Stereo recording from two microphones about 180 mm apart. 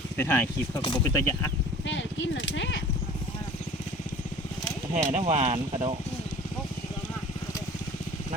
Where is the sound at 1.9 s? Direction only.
90° left.